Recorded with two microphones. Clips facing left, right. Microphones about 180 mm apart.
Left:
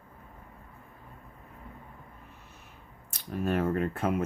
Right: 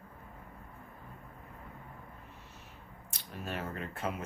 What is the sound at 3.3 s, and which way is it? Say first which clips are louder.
Speech: left 11 dB; 50° left (ahead or behind).